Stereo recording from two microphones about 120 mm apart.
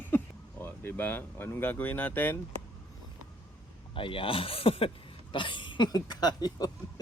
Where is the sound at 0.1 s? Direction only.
20° left (ahead or behind).